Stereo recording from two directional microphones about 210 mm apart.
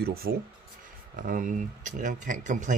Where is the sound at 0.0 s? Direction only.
45° right (ahead or behind).